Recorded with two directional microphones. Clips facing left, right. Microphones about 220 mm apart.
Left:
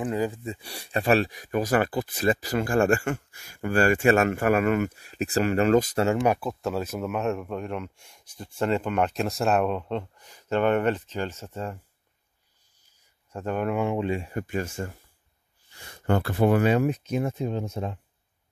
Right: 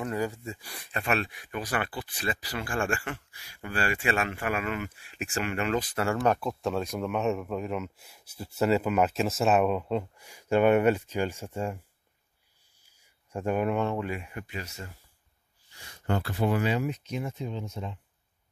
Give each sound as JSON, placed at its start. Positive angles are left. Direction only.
{"t": 0.0, "sound": "speech", "side_deg": 15}
{"t": 6.2, "sound": "speech", "side_deg": 5}
{"t": 13.3, "sound": "speech", "side_deg": -10}
{"t": 13.7, "sound": "speech", "side_deg": 10}
{"t": 13.9, "sound": "speech", "side_deg": 25}
{"t": 14.3, "sound": "speech", "side_deg": 50}